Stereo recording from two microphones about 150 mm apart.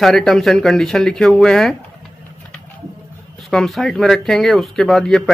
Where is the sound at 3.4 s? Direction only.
Centre (ahead or behind).